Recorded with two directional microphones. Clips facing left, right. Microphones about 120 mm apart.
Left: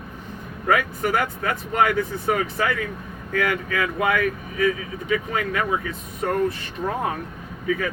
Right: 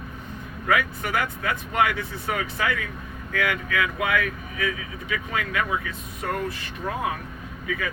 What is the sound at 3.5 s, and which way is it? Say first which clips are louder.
Speech: left 2 dB; 35° left (ahead or behind).